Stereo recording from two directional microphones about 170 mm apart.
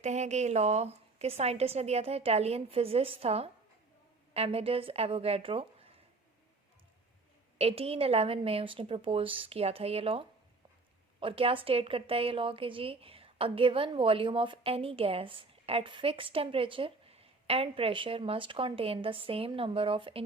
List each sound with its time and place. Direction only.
0.0 s a woman's voice: 40° right (ahead or behind)
7.6 s a woman's voice: 35° right (ahead or behind)